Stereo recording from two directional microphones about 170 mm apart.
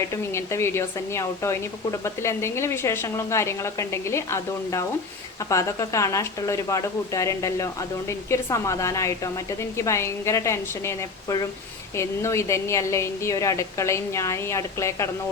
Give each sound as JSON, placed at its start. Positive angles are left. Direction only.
{"t": 0.3, "sound": "speech", "side_deg": 15}